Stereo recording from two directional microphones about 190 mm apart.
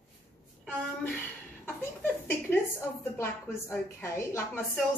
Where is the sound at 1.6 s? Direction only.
10° left (ahead or behind).